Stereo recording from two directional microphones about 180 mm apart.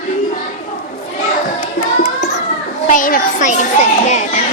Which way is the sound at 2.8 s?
50° left (ahead or behind).